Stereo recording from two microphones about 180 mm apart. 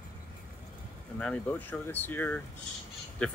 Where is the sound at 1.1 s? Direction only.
5° left (ahead or behind).